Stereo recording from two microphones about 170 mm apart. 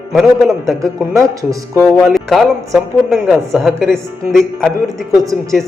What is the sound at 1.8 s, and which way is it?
A woman's voice, centre (ahead or behind).